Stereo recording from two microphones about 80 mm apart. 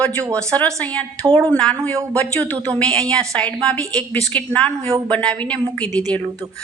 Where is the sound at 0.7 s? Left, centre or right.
Centre.